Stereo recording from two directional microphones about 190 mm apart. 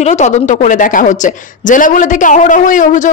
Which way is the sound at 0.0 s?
35° left (ahead or behind).